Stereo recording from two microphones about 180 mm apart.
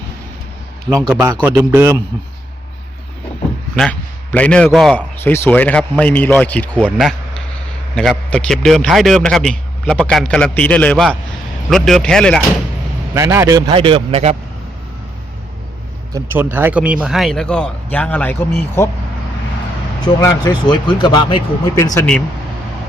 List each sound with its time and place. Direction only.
0.9 s speech: 20° right (ahead or behind)
1.4 s a man's voice: 10° right (ahead or behind)
3.8 s a man's voice: 5° left (ahead or behind)
5.2 s a man's voice: 10° left (ahead or behind)
13.1 s speech: 15° right (ahead or behind); by 14.3 s 35° right (ahead or behind)
16.1 s a man's voice: 10° right (ahead or behind); by 18.4 s 10° left (ahead or behind)
20.2 s speech: 20° left (ahead or behind)